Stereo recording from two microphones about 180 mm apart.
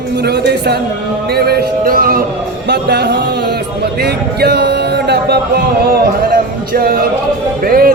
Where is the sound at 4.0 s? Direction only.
65° right (ahead or behind).